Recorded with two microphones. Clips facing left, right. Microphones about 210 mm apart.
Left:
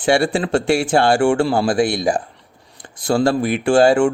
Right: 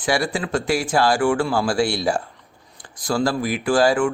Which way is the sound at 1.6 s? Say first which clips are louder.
Left 3 dB; 20° left (ahead or behind).